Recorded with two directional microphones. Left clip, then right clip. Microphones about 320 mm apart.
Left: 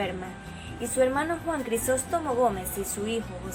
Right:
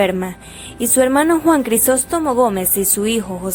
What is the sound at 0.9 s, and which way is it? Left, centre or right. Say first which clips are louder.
A woman's voice: right 11 dB; right.